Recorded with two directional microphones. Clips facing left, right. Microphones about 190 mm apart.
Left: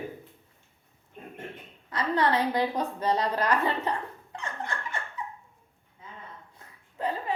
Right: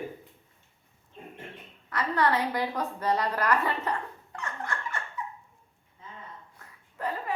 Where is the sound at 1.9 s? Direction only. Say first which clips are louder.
Left 1 dB; 20° left (ahead or behind).